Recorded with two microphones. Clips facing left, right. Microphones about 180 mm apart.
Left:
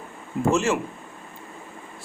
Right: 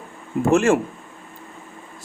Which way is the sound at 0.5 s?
55° right (ahead or behind).